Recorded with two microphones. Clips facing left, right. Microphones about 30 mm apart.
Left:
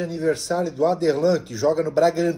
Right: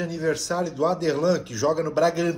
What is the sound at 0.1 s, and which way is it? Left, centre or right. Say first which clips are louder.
Speech: left 4 dB; centre.